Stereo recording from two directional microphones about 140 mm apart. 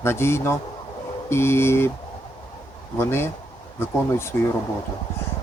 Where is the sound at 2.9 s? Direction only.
15° left (ahead or behind).